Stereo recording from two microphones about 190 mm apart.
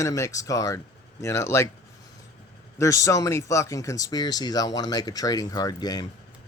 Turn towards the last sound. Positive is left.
turn(degrees=20)  # may be behind; listen again after turning